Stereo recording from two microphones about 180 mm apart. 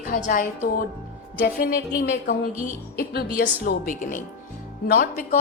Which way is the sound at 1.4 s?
60° left (ahead or behind).